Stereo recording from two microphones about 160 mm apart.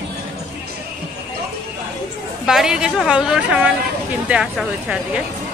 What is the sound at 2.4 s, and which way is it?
A woman's voice, 5° right (ahead or behind).